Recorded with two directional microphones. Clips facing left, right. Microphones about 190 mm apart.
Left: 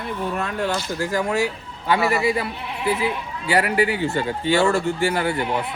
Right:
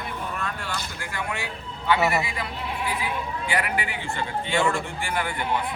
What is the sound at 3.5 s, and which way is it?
A man's voice, 40° left (ahead or behind).